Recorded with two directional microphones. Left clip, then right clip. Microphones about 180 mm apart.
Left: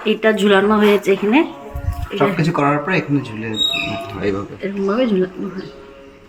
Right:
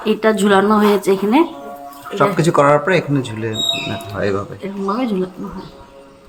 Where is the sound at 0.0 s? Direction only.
15° right (ahead or behind).